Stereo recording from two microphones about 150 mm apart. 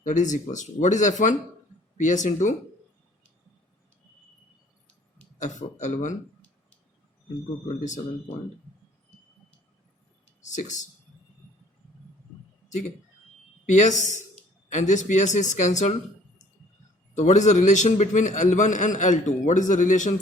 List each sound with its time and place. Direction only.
0.0 s a man's voice: 55° left (ahead or behind)
5.4 s speech: 55° left (ahead or behind)
10.4 s a man's voice: 55° left (ahead or behind)
13.7 s speech: 55° left (ahead or behind)
17.2 s a man's voice: 50° left (ahead or behind)